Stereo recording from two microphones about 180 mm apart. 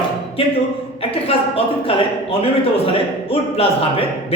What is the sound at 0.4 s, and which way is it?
A man's voice, 30° left (ahead or behind).